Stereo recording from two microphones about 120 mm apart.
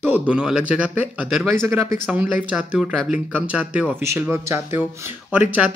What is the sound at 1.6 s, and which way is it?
Speech, 20° right (ahead or behind).